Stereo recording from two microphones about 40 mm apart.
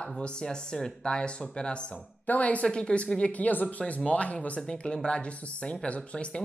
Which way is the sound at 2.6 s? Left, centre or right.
Left.